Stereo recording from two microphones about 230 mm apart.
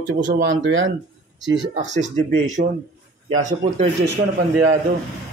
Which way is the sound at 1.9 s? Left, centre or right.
Right.